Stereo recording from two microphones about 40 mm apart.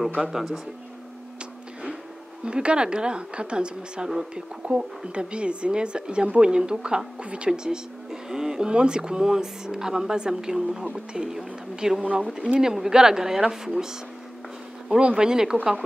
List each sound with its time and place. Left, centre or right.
0.2 s speech: centre
2.4 s speech: right; by 13.8 s centre
14.9 s speech: right